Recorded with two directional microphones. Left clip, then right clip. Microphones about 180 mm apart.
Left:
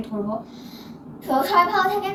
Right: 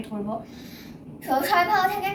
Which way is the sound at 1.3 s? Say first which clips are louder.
Left 2 dB; 15° right (ahead or behind).